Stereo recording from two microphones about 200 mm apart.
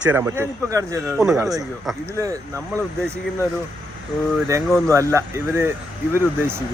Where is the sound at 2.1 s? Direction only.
15° right (ahead or behind).